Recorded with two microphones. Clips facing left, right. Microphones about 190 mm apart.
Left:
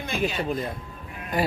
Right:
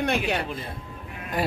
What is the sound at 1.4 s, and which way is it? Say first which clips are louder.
Speech: left 1 dB; centre (ahead or behind).